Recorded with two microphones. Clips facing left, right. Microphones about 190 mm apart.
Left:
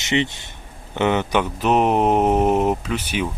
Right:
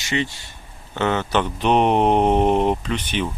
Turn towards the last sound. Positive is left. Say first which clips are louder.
# even
turn(degrees=10)  # may be behind; listen again after turning